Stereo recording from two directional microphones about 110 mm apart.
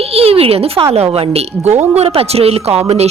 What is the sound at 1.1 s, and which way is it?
A man's voice, 75° right (ahead or behind).